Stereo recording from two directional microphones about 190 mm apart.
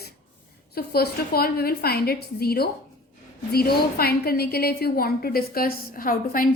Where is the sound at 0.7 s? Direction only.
55° left (ahead or behind).